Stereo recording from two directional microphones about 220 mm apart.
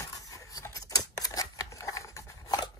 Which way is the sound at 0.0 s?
15° left (ahead or behind).